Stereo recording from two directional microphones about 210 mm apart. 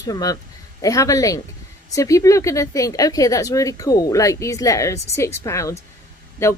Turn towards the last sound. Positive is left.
turn(degrees=10)  # may be behind; listen again after turning